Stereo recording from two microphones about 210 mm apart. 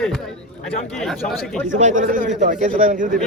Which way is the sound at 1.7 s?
35° right (ahead or behind).